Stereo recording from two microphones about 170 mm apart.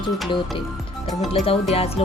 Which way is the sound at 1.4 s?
35° left (ahead or behind).